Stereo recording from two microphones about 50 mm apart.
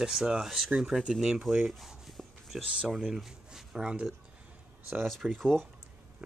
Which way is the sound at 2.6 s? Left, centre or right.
Right.